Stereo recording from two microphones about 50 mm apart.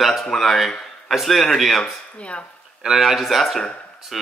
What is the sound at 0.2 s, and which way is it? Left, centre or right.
Speech, centre.